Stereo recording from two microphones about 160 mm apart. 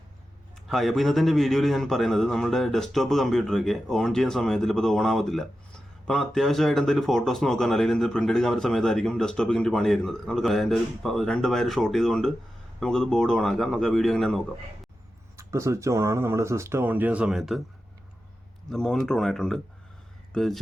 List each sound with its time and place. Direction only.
0.7 s a man's voice: centre (ahead or behind)
15.4 s speech: 20° right (ahead or behind); by 17.6 s centre (ahead or behind)
18.7 s a man's voice: 5° left (ahead or behind)